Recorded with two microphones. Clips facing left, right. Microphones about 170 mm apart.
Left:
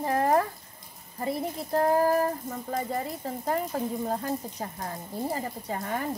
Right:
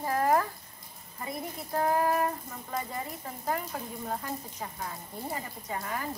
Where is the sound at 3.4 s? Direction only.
35° left (ahead or behind).